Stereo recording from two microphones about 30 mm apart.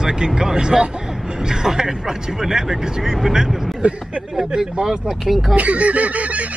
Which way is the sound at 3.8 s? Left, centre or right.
Right.